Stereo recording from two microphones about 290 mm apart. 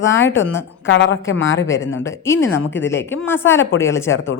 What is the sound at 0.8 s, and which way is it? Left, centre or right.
Speech, left.